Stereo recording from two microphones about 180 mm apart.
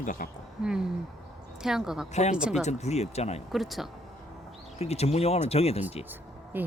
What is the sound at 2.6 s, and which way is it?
Speech, 40° left (ahead or behind).